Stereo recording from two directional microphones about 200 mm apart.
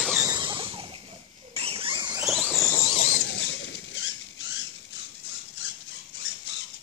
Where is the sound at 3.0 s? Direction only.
50° left (ahead or behind); by 4.1 s 65° left (ahead or behind).